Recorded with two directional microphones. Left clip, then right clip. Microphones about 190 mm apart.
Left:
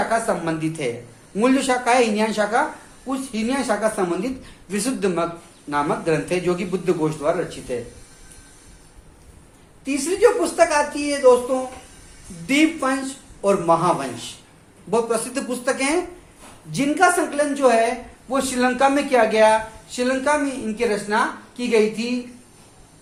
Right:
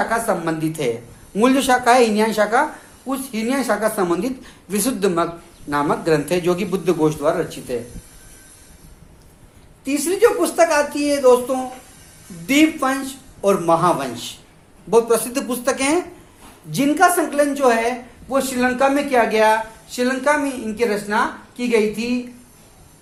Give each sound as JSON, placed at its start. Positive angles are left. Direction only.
{"t": 0.1, "sound": "speech", "side_deg": -40}
{"t": 9.8, "sound": "speech", "side_deg": -45}
{"t": 18.3, "sound": "speech", "side_deg": -25}